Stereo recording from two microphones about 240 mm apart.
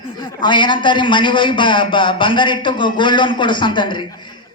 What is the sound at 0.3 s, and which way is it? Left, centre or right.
A man's voice, centre.